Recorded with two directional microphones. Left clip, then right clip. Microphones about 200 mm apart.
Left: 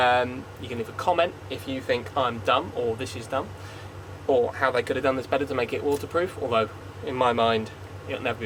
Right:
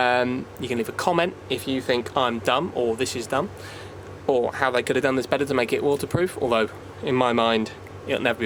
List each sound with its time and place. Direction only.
0.0 s speech: 60° right (ahead or behind)